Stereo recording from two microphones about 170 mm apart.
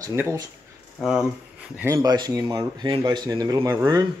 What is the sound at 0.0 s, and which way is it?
Speech, 15° right (ahead or behind).